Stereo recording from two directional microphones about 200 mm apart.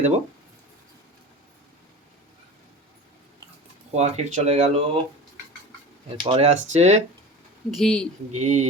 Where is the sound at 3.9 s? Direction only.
35° right (ahead or behind).